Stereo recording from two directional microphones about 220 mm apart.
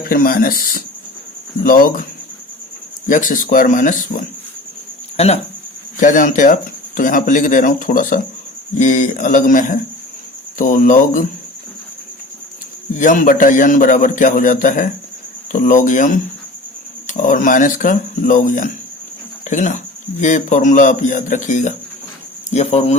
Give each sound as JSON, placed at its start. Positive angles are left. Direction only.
{"t": 0.0, "sound": "speech", "side_deg": 40}
{"t": 3.1, "sound": "speech", "side_deg": 35}
{"t": 13.0, "sound": "speech", "side_deg": 35}